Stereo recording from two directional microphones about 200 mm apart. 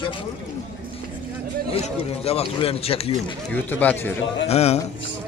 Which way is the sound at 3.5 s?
10° left (ahead or behind).